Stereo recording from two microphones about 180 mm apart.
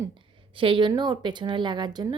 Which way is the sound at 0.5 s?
30° right (ahead or behind).